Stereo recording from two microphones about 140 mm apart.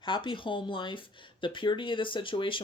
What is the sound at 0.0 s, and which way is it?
Speech, 35° left (ahead or behind).